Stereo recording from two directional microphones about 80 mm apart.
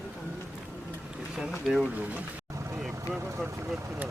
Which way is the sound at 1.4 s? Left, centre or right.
Centre.